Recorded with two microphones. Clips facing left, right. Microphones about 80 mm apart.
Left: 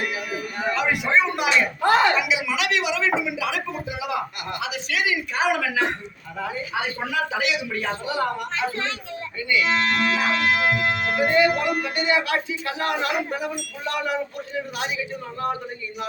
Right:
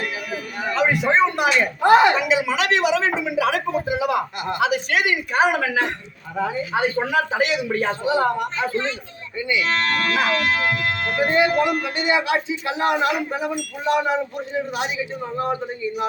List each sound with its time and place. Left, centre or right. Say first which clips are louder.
0.7 s a sound: right 3 dB; right
1.8 s speech: right 6 dB; centre
2.1 s speech: right 4 dB; right
3.2 s a sound: right 5 dB; right
4.6 s a woman's voice: right 6 dB; right
8.0 s speech: right 6 dB; right
8.5 s a woman's voice: right 3 dB; left
9.6 s music: left 1 dB; centre
11.3 s speech: right 2 dB; right